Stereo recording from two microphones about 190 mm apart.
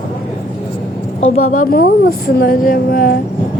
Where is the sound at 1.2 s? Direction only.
35° left (ahead or behind).